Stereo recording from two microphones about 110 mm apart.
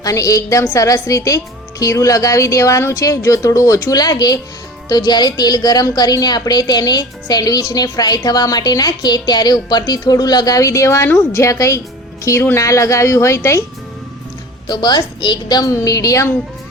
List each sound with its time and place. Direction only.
0.0 s a woman's voice: 30° left (ahead or behind)
14.7 s a woman's voice: 40° left (ahead or behind)